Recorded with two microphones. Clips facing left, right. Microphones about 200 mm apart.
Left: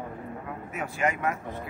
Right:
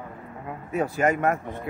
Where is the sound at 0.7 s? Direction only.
35° right (ahead or behind).